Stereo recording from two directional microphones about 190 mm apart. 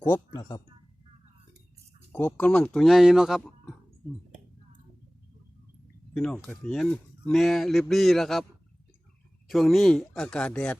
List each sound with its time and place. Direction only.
0.1 s speech: 20° left (ahead or behind)
2.1 s speech: 10° left (ahead or behind)
6.1 s speech: 5° left (ahead or behind)
9.5 s speech: centre (ahead or behind)